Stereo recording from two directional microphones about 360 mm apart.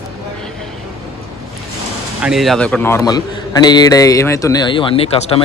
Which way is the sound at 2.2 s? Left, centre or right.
Centre.